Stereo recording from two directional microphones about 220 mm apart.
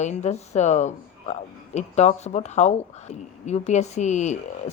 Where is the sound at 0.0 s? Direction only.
30° left (ahead or behind).